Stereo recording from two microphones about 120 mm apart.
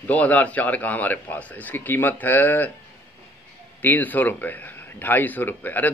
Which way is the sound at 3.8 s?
15° left (ahead or behind).